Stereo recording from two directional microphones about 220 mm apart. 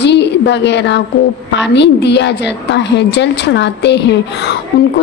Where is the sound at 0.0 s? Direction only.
50° left (ahead or behind).